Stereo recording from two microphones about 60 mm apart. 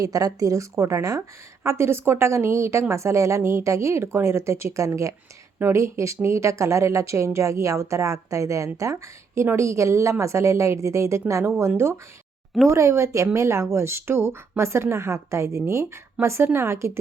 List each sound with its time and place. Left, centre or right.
0.0 s speech: right
1.6 s speech: right
12.6 s speech: right